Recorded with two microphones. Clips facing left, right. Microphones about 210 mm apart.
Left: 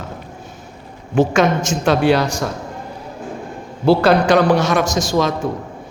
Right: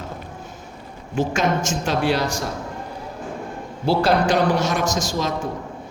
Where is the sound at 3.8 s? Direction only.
70° left (ahead or behind).